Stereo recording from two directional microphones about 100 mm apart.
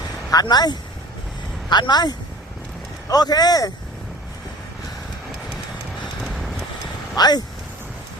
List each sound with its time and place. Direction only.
0.3 s speech: 40° left (ahead or behind)
6.2 s vehicle: centre (ahead or behind)
7.2 s speech: 45° left (ahead or behind)